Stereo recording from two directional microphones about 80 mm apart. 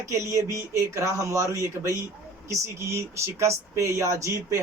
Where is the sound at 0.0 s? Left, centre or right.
Right.